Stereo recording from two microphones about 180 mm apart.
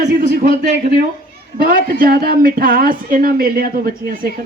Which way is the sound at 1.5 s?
50° right (ahead or behind).